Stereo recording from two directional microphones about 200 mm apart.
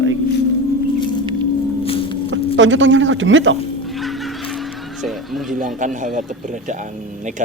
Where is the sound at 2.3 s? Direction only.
70° right (ahead or behind).